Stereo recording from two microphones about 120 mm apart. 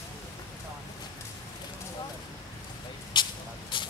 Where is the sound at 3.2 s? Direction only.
40° left (ahead or behind).